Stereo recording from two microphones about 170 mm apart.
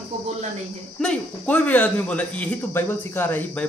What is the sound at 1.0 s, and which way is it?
A man's voice, 5° left (ahead or behind).